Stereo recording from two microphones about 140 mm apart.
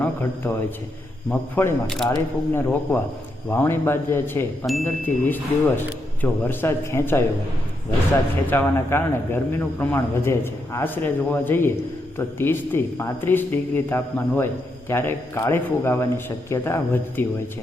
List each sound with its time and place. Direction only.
0.0 s speech: 15° left (ahead or behind)
8.4 s speech: 15° left (ahead or behind)